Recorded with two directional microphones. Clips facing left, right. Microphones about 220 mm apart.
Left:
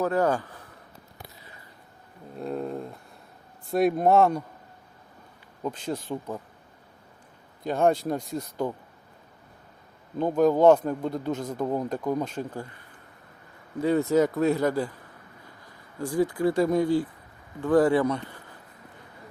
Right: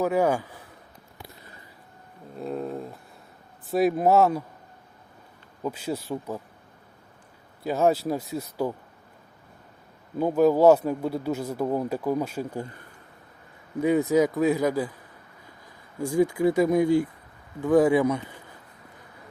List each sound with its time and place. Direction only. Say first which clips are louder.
0.0 s speech: right 1 dB; 10° right (ahead or behind)
2.4 s a sound: even; centre (ahead or behind)
3.7 s a man's voice: even; centre (ahead or behind)
5.6 s a man's voice: right 1 dB; 10° right (ahead or behind)
7.6 s a man's voice: right 1 dB; 5° right (ahead or behind)
10.2 s a man's voice: right 1 dB; 5° right (ahead or behind)
13.8 s a man's voice: right 1 dB; 15° right (ahead or behind)
16.2 s a man's voice: right 2 dB; 10° right (ahead or behind)